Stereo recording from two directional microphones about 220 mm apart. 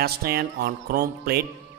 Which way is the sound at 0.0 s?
45° right (ahead or behind).